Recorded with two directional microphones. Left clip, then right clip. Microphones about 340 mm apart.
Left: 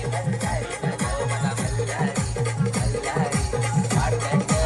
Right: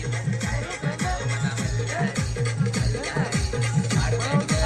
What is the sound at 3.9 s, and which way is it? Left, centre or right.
Music, centre.